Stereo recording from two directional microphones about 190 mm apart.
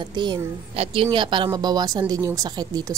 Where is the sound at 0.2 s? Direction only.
25° right (ahead or behind).